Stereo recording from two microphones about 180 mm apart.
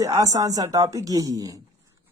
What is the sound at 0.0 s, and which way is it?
A woman's voice, 20° right (ahead or behind).